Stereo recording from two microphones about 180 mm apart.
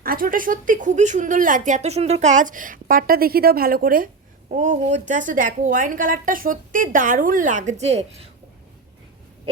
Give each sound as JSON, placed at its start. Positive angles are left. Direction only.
{"t": 0.0, "sound": "a woman's voice", "side_deg": -55}